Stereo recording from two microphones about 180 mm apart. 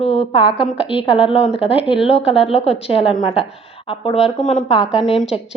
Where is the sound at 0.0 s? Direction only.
35° left (ahead or behind).